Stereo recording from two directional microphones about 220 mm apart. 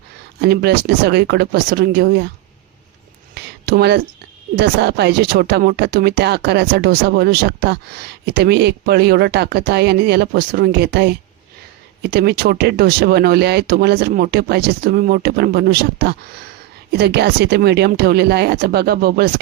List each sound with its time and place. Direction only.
0.4 s speech: 45° right (ahead or behind)
3.3 s a sound: 45° right (ahead or behind)
4.6 s speech: 50° right (ahead or behind)
12.1 s speech: 45° right (ahead or behind)